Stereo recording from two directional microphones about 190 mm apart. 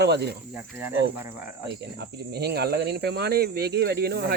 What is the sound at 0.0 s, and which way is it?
Speech, 60° right (ahead or behind).